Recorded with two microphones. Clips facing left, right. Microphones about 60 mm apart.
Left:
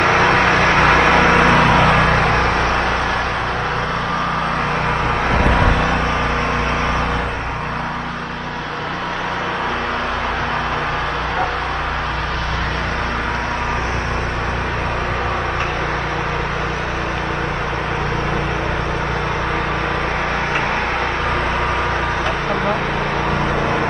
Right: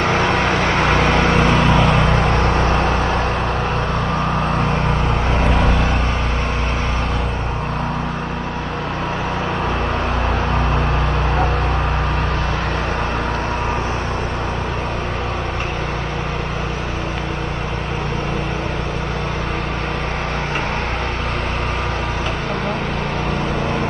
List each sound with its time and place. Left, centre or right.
0.0 s vehicle: left
4.8 s vehicle: left